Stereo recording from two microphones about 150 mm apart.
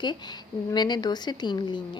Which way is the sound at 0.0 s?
30° left (ahead or behind).